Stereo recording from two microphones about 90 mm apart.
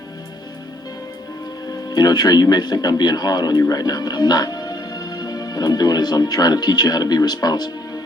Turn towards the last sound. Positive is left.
turn(degrees=50)  # may be behind; listen again after turning